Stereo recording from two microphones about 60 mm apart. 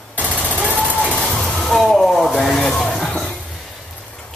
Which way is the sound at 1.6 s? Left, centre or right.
Centre.